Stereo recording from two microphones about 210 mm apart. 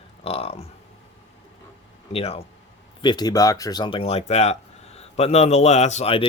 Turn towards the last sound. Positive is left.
turn(degrees=30)  # may be behind; listen again after turning